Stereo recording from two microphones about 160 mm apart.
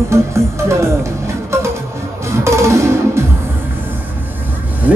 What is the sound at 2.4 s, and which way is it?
Music, 15° right (ahead or behind).